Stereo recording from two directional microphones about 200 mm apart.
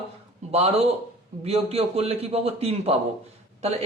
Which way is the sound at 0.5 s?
30° right (ahead or behind).